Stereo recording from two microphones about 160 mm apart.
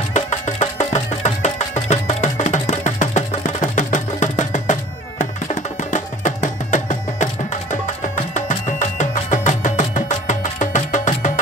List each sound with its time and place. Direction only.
0.1 s music: 45° left (ahead or behind)